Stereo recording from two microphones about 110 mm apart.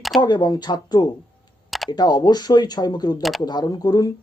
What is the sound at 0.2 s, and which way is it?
Speech, 40° left (ahead or behind).